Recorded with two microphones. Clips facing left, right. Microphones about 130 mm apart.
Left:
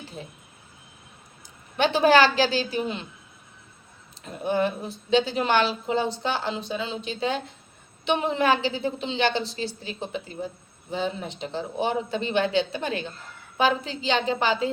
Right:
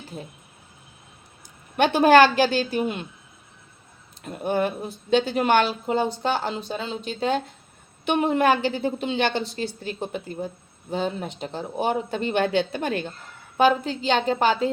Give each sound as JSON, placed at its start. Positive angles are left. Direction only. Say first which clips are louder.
{"t": 1.8, "sound": "a woman's voice", "louder": "right 3 dB", "side_deg": -55}
{"t": 4.4, "sound": "a woman's voice", "louder": "right 1 dB", "side_deg": -50}